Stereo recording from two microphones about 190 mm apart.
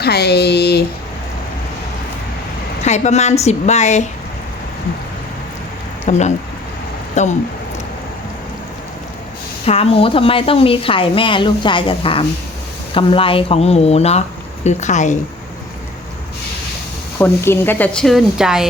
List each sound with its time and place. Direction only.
0.0 s speech: 60° left (ahead or behind)
2.8 s speech: 35° left (ahead or behind)
6.1 s speech: 40° left (ahead or behind)
9.6 s speech: 30° left (ahead or behind)
17.2 s speech: 10° left (ahead or behind)